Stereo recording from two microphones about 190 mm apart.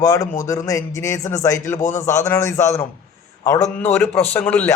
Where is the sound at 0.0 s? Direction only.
20° left (ahead or behind).